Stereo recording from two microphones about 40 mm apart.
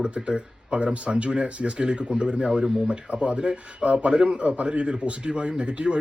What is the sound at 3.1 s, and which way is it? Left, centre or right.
A man's voice, right.